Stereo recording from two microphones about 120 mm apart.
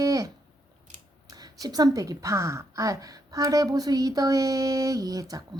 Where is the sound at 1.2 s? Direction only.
30° right (ahead or behind).